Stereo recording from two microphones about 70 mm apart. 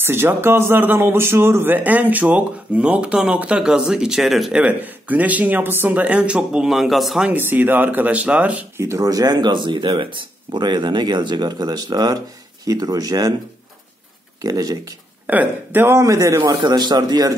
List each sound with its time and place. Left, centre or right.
0.0 s a man's voice: right; by 4.6 s centre
4.6 s a man's voice: right; by 7.2 s centre
7.3 s a man's voice: right
8.7 s speech: right
14.4 s speech: right
15.2 s a man's voice: right
16.0 s a man's voice: right
16.6 s a man's voice: right